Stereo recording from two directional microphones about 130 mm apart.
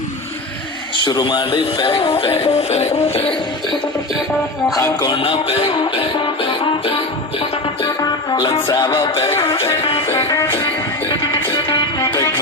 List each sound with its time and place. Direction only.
0.9 s speech: 35° left (ahead or behind); by 3.3 s 50° left (ahead or behind)
4.7 s music: 30° left (ahead or behind)
5.2 s music: 45° left (ahead or behind); by 8.9 s 30° left (ahead or behind)
8.9 s music: 40° left (ahead or behind)
10.1 s music: 25° left (ahead or behind)
11.9 s music: 20° left (ahead or behind)